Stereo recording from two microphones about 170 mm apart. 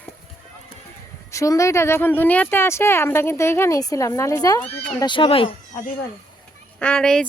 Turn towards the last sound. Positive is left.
turn(degrees=5)  # may be behind; listen again after turning